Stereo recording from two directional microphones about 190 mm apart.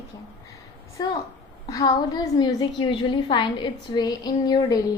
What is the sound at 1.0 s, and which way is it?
A woman's voice, 25° left (ahead or behind).